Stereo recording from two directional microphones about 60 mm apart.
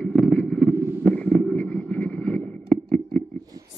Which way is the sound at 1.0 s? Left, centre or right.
Centre.